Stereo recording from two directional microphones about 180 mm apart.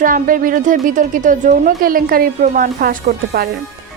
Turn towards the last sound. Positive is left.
turn(degrees=-55)  # may be behind; listen again after turning